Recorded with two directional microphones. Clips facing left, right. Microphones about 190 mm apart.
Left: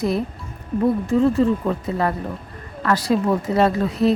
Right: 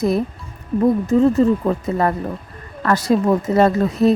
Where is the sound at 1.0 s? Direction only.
40° right (ahead or behind).